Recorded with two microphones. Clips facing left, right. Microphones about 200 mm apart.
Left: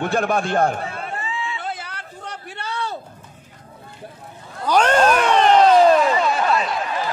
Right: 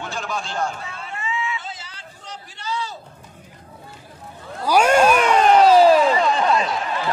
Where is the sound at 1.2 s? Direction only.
35° left (ahead or behind).